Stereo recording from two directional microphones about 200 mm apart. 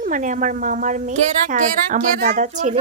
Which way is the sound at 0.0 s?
40° right (ahead or behind).